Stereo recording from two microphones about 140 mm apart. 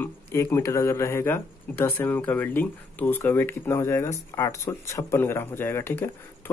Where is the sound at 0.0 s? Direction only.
20° left (ahead or behind).